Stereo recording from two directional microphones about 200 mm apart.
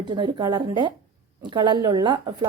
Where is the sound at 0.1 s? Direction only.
20° right (ahead or behind).